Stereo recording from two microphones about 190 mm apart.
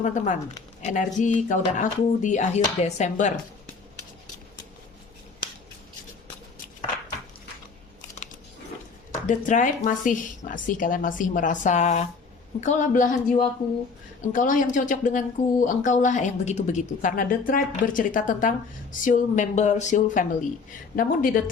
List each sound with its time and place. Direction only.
0.0 s speech: 40° left (ahead or behind)
9.2 s speech: 40° left (ahead or behind)